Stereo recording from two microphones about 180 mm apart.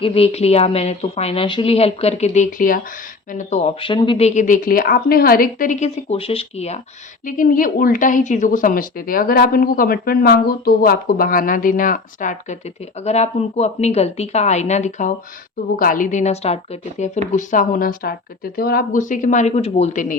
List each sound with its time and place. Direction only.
0.0 s speech: 30° left (ahead or behind); by 2.8 s 50° left (ahead or behind)
3.3 s speech: 40° left (ahead or behind)
7.3 s speech: 50° left (ahead or behind)